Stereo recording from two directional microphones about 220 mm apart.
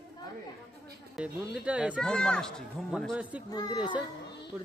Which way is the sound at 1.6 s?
5° right (ahead or behind).